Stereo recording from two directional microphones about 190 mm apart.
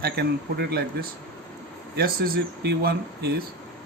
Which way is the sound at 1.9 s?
55° right (ahead or behind).